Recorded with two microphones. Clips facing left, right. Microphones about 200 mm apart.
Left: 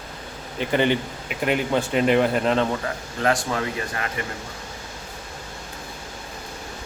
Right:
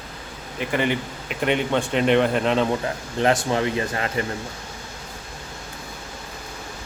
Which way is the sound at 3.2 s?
25° right (ahead or behind).